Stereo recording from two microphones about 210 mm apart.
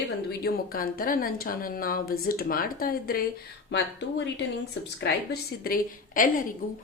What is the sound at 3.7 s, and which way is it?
Speech, 55° left (ahead or behind).